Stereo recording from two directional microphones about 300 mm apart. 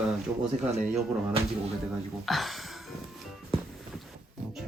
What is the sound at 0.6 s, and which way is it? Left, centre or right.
Speech, centre.